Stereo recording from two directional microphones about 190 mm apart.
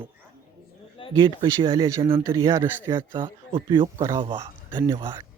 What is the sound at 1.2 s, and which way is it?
Speech, 25° right (ahead or behind).